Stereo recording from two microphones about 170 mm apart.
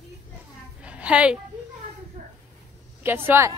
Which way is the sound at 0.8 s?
5° right (ahead or behind).